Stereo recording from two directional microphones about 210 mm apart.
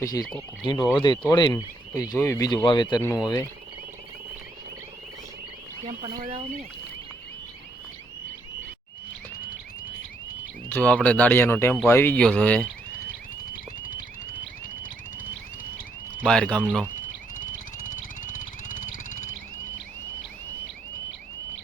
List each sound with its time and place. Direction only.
0.0 s speech: 15° left (ahead or behind)
6.1 s speech: 35° right (ahead or behind)
10.7 s speech: 5° left (ahead or behind)
16.2 s speech: 5° left (ahead or behind)
17.4 s music: 40° left (ahead or behind)